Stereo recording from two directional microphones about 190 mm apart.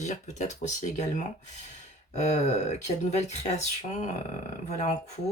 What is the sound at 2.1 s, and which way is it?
Speech, 35° left (ahead or behind).